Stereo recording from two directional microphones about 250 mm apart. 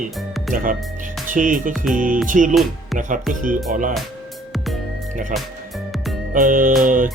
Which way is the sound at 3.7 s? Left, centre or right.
Right.